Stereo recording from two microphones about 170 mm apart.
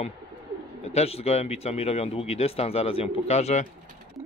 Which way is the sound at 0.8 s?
35° left (ahead or behind).